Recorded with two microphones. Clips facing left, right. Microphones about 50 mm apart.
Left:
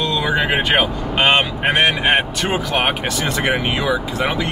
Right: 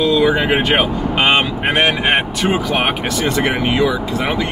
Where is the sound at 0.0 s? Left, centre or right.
Centre.